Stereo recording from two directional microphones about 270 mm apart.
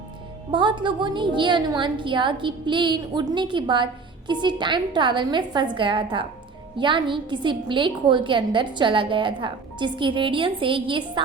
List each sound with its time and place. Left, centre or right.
0.5 s a woman's voice: centre